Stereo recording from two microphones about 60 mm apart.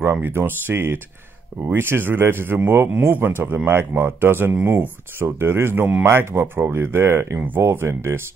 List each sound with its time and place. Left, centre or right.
0.2 s speech: right
7.3 s speech: right